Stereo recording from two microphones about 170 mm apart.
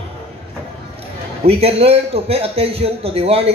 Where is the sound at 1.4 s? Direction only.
35° right (ahead or behind).